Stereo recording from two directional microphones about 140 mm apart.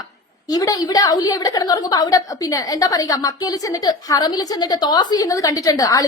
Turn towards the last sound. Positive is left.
turn(degrees=25)  # may be behind; listen again after turning